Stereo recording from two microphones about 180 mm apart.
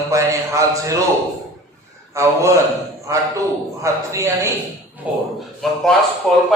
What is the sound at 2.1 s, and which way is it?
A man's voice, 15° right (ahead or behind).